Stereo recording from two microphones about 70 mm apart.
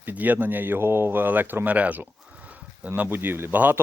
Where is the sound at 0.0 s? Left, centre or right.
Right.